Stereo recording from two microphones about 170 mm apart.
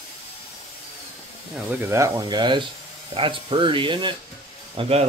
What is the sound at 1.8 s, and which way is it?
Speech, 15° right (ahead or behind).